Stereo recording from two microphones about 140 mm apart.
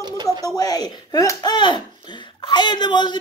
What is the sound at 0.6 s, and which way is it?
Speech, 30° left (ahead or behind).